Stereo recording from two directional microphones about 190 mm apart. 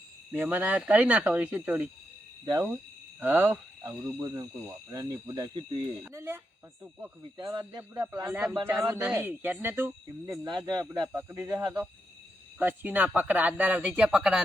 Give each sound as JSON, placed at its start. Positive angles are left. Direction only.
{"t": 0.3, "sound": "speech", "side_deg": -10}
{"t": 3.2, "sound": "speech", "side_deg": -10}
{"t": 7.2, "sound": "speech", "side_deg": -25}
{"t": 8.0, "sound": "speech", "side_deg": -10}